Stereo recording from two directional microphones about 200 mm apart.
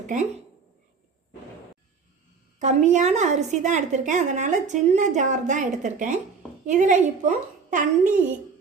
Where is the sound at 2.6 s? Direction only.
35° right (ahead or behind).